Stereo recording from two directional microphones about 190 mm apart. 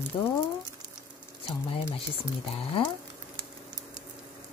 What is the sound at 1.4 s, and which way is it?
Speech, 30° left (ahead or behind).